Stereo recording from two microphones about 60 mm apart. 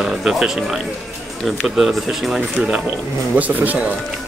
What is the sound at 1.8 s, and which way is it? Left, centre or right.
Speech, centre.